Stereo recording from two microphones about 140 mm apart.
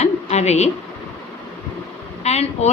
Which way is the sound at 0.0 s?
50° left (ahead or behind).